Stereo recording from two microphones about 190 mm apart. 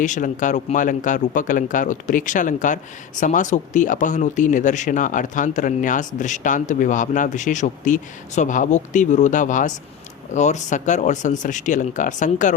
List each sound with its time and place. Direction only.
0.0 s speech: 40° left (ahead or behind)